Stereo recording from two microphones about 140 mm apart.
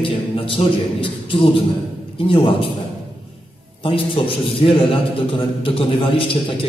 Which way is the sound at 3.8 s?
40° left (ahead or behind).